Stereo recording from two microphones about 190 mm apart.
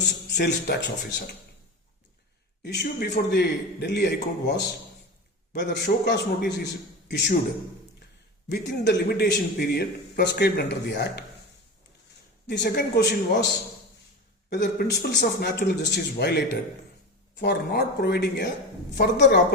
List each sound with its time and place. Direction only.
0.0 s a sound: 60° left (ahead or behind)
2.7 s a man's voice: 60° left (ahead or behind)
8.4 s a man's voice: 60° left (ahead or behind)
12.5 s a man's voice: 60° left (ahead or behind)
14.5 s a man's voice: 60° left (ahead or behind)